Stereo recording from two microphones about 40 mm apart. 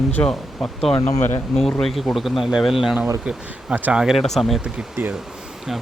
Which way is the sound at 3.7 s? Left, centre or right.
Right.